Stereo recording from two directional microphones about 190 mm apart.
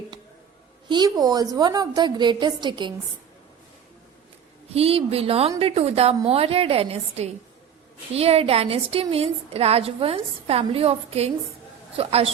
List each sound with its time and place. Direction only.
0.9 s a woman's voice: 20° right (ahead or behind)
4.7 s a woman's voice: 30° right (ahead or behind)